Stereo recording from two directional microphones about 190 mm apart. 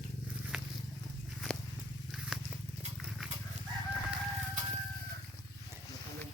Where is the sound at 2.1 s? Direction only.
Centre (ahead or behind).